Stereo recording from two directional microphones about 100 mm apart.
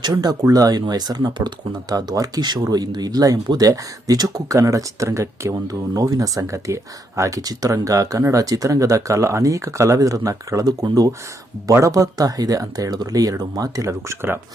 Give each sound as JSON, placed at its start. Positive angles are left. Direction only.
{"t": 0.0, "sound": "speech", "side_deg": -40}